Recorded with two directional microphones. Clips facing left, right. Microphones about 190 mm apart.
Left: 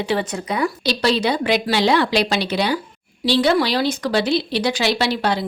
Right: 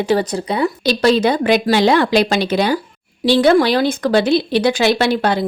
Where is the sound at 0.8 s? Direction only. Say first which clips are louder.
Right 7 dB; 50° right (ahead or behind).